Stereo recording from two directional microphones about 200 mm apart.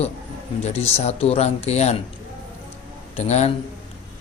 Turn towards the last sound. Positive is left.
turn(degrees=35)  # may be behind; listen again after turning